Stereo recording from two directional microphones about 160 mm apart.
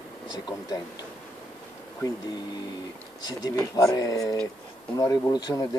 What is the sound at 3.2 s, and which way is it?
Speech, 25° left (ahead or behind).